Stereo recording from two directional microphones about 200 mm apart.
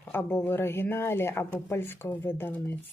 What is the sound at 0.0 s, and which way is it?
Speech, 10° left (ahead or behind).